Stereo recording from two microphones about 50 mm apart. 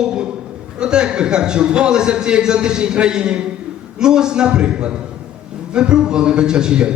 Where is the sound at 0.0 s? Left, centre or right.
Centre.